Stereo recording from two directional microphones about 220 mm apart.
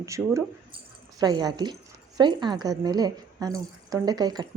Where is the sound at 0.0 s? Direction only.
15° right (ahead or behind).